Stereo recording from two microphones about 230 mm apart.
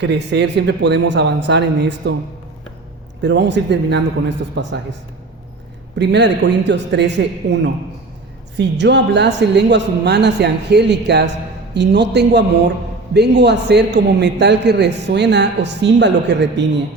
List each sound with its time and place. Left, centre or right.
0.0 s a man's voice: right
3.2 s a man's voice: right
6.0 s a man's voice: right